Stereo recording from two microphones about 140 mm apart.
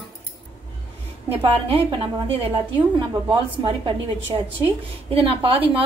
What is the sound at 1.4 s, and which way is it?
Speech, 40° right (ahead or behind).